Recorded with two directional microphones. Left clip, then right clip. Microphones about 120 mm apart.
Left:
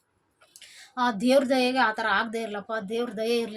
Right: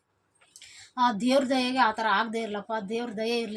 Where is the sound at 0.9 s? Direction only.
20° left (ahead or behind).